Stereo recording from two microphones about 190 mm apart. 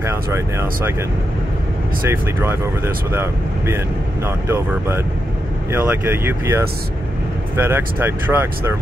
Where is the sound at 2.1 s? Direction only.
10° right (ahead or behind).